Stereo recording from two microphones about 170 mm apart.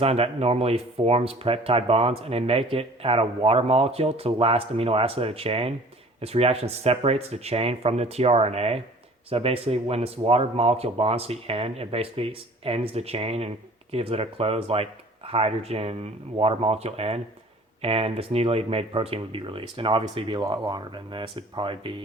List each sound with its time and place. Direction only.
0.0 s speech: 35° right (ahead or behind)